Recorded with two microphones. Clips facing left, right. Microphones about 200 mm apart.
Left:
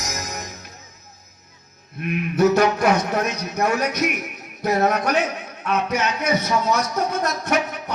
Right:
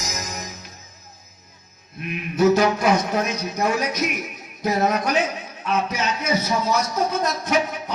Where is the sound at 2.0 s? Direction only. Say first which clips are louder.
Even; 65° left (ahead or behind).